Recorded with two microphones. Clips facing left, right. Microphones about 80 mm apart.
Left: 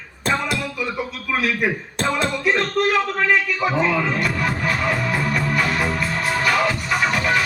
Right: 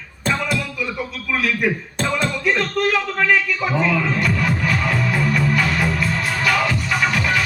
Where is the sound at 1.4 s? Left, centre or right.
Left.